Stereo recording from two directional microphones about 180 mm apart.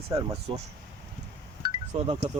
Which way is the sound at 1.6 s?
25° right (ahead or behind).